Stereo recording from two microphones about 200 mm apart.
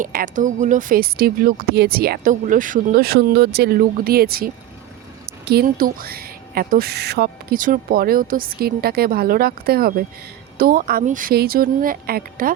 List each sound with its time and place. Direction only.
0.0 s speech: 45° right (ahead or behind)